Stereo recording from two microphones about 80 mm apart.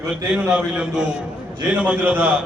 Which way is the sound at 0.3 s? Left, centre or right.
Centre.